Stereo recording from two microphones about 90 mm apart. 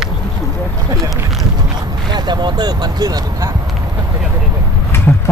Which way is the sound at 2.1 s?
55° right (ahead or behind).